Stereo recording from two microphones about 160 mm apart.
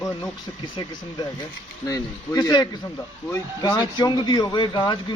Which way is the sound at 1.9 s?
20° left (ahead or behind).